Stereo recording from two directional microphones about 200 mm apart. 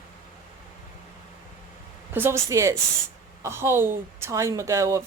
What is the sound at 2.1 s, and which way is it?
A woman's voice, 10° right (ahead or behind).